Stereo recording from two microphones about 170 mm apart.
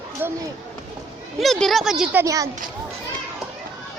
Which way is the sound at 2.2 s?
20° right (ahead or behind).